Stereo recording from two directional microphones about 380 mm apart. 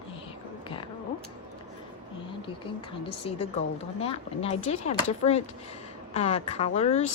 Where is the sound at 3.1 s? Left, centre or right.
Centre.